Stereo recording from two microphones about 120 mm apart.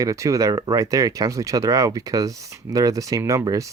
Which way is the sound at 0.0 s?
25° right (ahead or behind).